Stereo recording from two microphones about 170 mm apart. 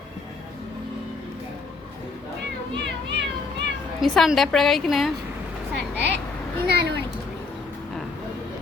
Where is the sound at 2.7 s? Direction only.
90° right.